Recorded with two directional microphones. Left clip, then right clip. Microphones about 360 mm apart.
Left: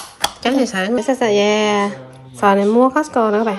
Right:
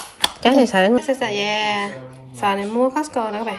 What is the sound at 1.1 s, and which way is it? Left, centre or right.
A woman's voice, centre.